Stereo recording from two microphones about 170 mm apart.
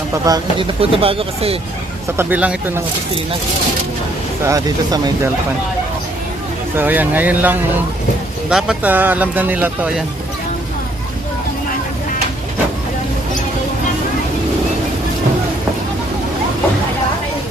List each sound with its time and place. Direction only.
0.3 s speech: 20° right (ahead or behind)
0.8 s speech: 35° right (ahead or behind)
2.1 s speech: 10° right (ahead or behind)
4.4 s speech: 20° right (ahead or behind)
6.7 s speech: 10° right (ahead or behind)